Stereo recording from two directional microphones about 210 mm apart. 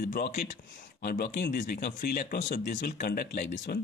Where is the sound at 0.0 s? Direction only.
45° left (ahead or behind).